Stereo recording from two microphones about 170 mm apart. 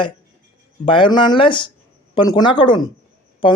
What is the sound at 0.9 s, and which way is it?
Speech, 30° left (ahead or behind).